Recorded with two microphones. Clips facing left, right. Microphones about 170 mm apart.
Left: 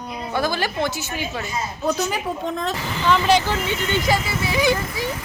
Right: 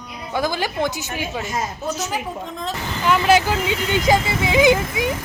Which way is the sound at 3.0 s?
5° right (ahead or behind).